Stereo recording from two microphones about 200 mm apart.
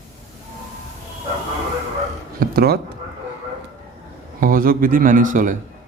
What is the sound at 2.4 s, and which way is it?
Speech, 50° right (ahead or behind).